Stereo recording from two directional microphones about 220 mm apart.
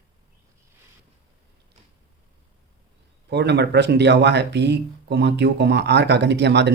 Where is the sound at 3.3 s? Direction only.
50° right (ahead or behind).